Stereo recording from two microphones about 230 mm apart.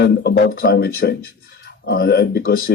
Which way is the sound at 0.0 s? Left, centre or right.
Left.